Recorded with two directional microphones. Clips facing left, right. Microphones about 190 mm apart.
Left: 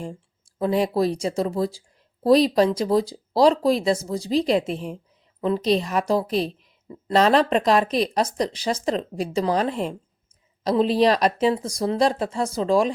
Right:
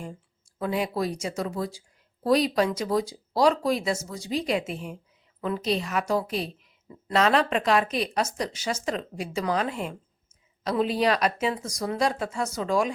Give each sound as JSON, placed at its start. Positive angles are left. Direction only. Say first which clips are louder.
{"t": 0.6, "sound": "a woman's voice", "louder": "left 6 dB", "side_deg": 35}